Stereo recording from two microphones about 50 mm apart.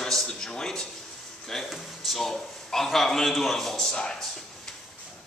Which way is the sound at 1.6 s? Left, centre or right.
Centre.